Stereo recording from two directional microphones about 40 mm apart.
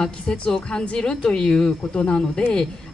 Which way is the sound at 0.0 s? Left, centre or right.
Centre.